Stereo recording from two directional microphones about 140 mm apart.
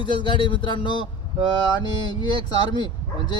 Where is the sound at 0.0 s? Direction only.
35° left (ahead or behind).